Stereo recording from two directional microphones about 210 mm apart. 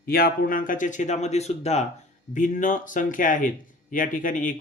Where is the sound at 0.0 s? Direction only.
45° left (ahead or behind).